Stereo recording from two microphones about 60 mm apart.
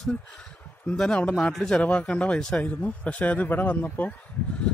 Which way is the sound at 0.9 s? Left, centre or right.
Centre.